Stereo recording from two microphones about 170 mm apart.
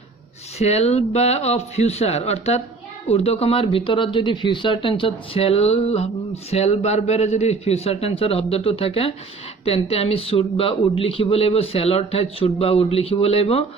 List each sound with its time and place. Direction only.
0.6 s speech: 40° left (ahead or behind)